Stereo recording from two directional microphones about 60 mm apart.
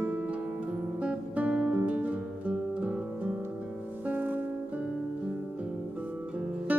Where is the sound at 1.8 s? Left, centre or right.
Right.